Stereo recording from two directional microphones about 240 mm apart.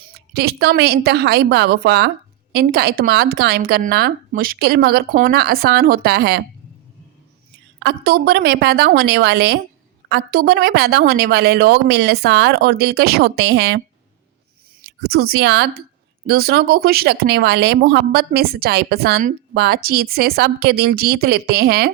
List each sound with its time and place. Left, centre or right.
0.0 s speech: right
7.8 s a woman's voice: right
14.8 s speech: right